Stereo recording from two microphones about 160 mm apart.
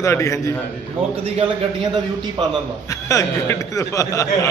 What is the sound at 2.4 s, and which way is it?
Speech, 30° right (ahead or behind).